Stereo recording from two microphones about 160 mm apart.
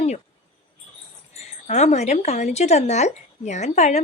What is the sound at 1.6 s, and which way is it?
A woman's voice, 45° left (ahead or behind).